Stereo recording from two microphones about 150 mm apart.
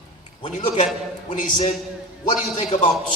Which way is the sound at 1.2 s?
55° left (ahead or behind).